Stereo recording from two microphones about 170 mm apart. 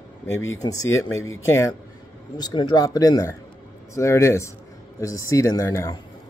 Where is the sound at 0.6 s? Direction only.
20° left (ahead or behind).